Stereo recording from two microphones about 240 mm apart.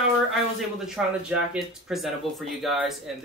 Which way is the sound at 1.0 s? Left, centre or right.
Centre.